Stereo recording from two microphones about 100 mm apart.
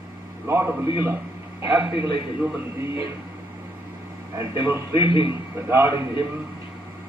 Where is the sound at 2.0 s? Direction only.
55° left (ahead or behind).